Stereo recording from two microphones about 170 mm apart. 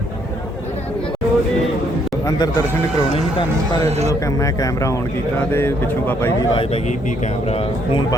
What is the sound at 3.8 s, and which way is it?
Speech, 40° right (ahead or behind).